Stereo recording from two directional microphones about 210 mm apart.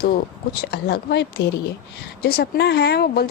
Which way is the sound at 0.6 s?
50° left (ahead or behind).